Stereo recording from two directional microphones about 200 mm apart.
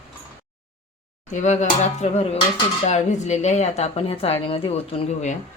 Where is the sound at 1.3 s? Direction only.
35° left (ahead or behind).